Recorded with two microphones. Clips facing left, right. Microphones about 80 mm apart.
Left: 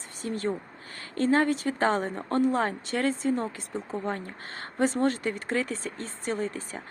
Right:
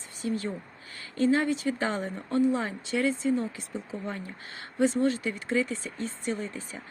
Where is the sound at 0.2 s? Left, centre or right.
Left.